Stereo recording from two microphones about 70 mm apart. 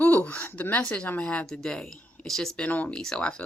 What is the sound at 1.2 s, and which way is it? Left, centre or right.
Speech, centre.